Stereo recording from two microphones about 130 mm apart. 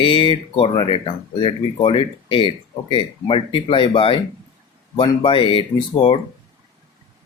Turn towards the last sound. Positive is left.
turn(degrees=40)  # may be behind; listen again after turning